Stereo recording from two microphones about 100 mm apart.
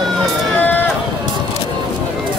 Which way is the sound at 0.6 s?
15° left (ahead or behind).